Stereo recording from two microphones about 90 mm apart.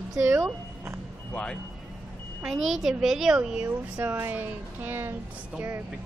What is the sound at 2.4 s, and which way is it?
Speech, centre (ahead or behind).